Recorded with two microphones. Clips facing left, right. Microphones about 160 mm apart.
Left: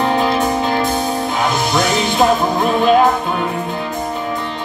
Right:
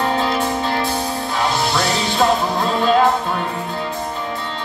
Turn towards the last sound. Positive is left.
turn(degrees=20)  # may be behind; listen again after turning